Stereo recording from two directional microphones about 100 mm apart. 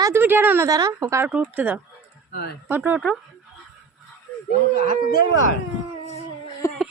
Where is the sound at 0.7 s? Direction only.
35° right (ahead or behind).